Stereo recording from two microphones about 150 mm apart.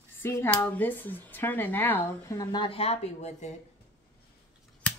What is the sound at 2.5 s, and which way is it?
Speech, 35° left (ahead or behind).